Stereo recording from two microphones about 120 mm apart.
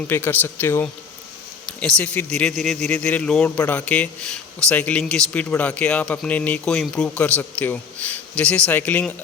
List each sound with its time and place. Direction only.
0.1 s a man's voice: 15° left (ahead or behind)